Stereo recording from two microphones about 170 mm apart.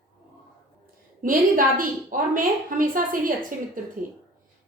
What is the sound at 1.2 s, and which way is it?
A woman's voice, 55° right (ahead or behind).